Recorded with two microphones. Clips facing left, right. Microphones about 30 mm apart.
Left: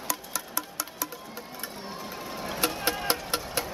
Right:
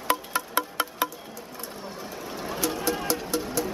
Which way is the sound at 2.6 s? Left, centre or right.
Left.